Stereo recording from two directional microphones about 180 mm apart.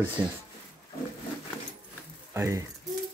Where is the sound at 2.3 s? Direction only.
15° right (ahead or behind).